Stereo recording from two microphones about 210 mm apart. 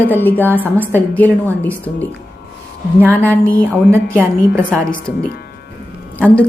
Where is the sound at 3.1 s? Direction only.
10° left (ahead or behind).